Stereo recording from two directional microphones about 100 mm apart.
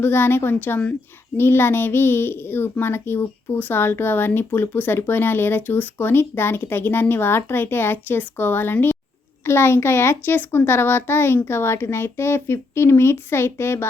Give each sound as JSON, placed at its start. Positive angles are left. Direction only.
{"t": 0.0, "sound": "a child's voice", "side_deg": 20}